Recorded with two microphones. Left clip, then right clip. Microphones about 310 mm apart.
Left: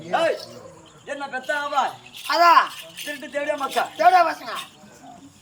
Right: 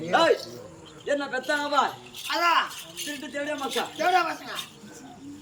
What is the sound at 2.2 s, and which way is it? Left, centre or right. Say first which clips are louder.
A child's voice: left 8 dB; centre.